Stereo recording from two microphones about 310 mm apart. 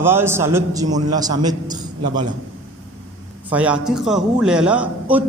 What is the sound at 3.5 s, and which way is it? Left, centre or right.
A man's voice, centre.